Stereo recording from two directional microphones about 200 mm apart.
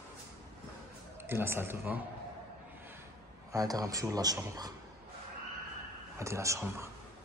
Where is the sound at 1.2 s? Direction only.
10° right (ahead or behind).